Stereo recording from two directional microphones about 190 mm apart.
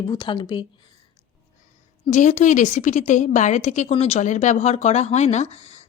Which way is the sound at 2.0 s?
40° left (ahead or behind).